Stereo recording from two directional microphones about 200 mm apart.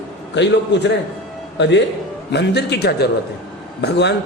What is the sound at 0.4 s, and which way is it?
Speech, 60° left (ahead or behind).